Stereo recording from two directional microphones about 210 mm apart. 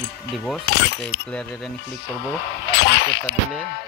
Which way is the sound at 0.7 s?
55° left (ahead or behind).